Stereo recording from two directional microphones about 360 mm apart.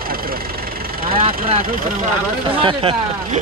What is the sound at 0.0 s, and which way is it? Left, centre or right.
Engine, right.